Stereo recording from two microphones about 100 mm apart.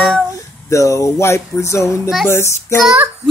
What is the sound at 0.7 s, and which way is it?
Speech, 30° left (ahead or behind).